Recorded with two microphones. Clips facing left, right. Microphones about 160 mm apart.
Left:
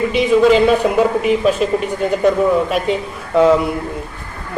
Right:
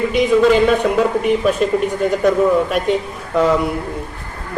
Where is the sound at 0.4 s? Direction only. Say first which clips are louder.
Left 1 dB; centre (ahead or behind).